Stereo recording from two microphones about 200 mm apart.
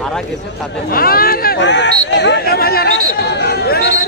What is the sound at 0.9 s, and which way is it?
Speech, 50° left (ahead or behind).